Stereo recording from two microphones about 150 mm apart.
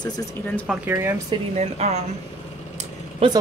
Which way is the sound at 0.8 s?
15° right (ahead or behind).